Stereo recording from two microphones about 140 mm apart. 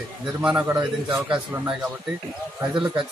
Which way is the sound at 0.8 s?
30° right (ahead or behind).